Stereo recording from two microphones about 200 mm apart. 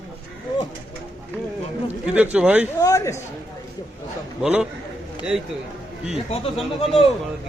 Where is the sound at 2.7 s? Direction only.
15° left (ahead or behind).